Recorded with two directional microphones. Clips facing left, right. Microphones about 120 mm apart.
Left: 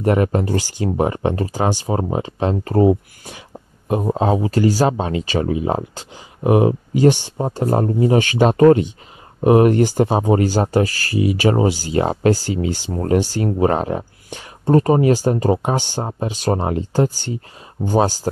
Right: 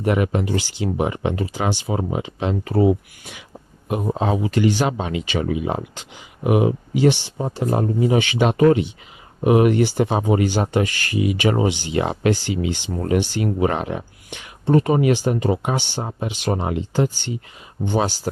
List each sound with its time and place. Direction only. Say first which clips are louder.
0.0 s speech: left 3 dB; 35° left (ahead or behind)